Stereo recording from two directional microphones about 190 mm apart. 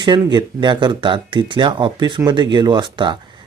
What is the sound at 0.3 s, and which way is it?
Speech, 25° right (ahead or behind).